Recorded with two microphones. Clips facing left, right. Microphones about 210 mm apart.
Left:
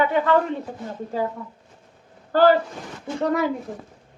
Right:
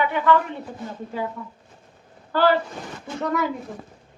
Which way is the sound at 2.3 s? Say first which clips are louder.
Left 3 dB; 40° left (ahead or behind).